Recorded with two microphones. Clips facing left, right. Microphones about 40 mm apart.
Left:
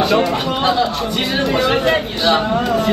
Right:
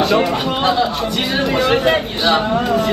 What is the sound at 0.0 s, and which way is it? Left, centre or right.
Speech, centre.